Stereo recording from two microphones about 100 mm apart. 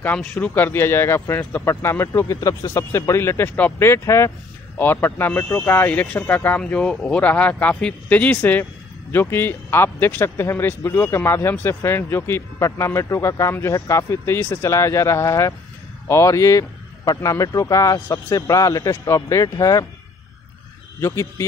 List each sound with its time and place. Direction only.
0.0 s a man's voice: 15° left (ahead or behind); by 19.9 s 35° left (ahead or behind)
21.0 s speech: 30° left (ahead or behind)